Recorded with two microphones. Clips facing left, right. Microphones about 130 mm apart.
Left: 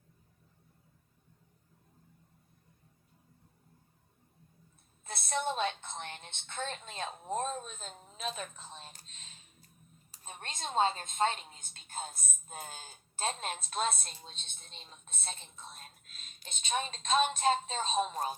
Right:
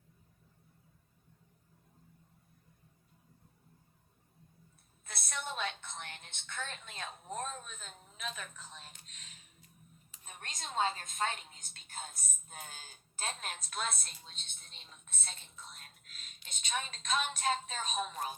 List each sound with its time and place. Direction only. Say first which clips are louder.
5.0 s a woman's voice: left 8 dB; 25° left (ahead or behind)
15.3 s a sound: left 6 dB; 35° left (ahead or behind)
16.5 s a woman's voice: left 4 dB; 25° left (ahead or behind)